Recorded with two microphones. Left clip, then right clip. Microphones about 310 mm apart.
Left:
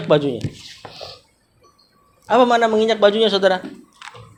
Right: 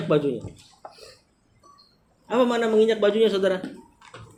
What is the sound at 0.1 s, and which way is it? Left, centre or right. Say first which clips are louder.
Speech: left 6 dB; left.